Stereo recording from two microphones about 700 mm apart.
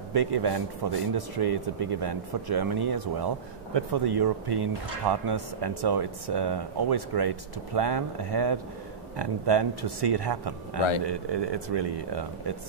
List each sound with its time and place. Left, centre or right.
0.1 s speech: right